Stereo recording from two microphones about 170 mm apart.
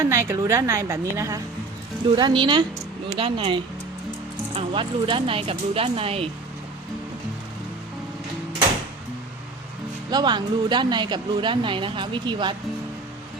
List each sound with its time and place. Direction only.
0.0 s a woman's voice: 15° right (ahead or behind); by 6.2 s 35° right (ahead or behind)
10.1 s a woman's voice: 25° right (ahead or behind)